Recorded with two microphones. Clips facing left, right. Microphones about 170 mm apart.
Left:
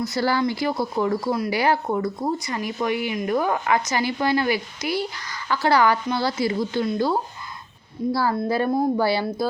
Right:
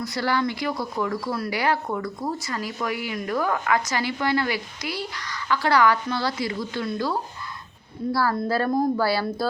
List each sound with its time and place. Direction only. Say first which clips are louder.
0.1 s a woman's voice: even; 30° left (ahead or behind)